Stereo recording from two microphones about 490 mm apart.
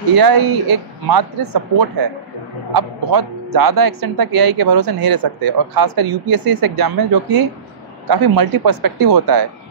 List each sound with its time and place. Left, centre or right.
0.1 s speech: right